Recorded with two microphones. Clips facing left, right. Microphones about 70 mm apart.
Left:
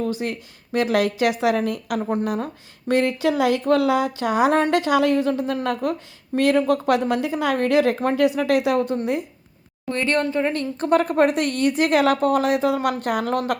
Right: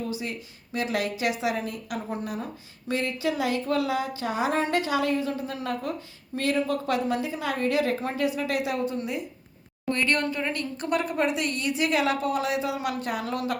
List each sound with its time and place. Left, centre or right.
0.1 s a woman's voice: left
9.9 s speech: left
11.1 s a woman's voice: left